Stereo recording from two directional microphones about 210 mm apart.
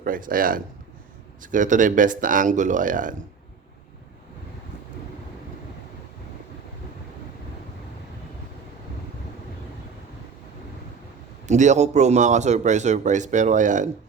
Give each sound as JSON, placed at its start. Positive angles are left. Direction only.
{"t": 0.0, "sound": "a man's voice", "side_deg": -40}
{"t": 11.4, "sound": "a man's voice", "side_deg": -35}